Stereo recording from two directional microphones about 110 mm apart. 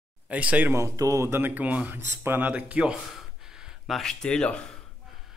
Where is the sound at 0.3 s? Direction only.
10° right (ahead or behind).